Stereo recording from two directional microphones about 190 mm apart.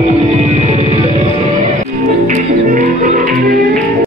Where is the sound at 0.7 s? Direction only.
35° right (ahead or behind); by 3.8 s 50° right (ahead or behind).